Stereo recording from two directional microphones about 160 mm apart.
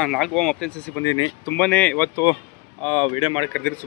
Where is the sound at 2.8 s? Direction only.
40° left (ahead or behind).